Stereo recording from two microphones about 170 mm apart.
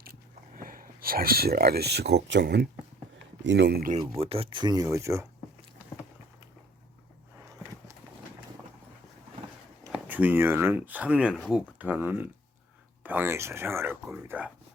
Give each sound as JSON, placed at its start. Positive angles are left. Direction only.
{"t": 0.0, "sound": "a sound", "side_deg": -60}
{"t": 3.4, "sound": "speech", "side_deg": -90}
{"t": 3.9, "sound": "speech", "side_deg": -35}
{"t": 9.9, "sound": "speech", "side_deg": -10}